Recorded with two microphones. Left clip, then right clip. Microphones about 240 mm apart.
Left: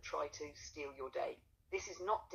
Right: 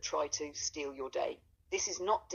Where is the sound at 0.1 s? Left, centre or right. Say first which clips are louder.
Right 5 dB; right.